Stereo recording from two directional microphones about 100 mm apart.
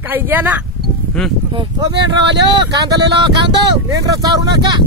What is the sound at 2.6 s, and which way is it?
Speech, 40° right (ahead or behind).